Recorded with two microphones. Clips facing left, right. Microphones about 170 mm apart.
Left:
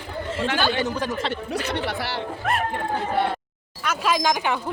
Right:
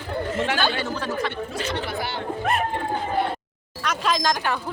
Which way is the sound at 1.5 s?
65° left (ahead or behind).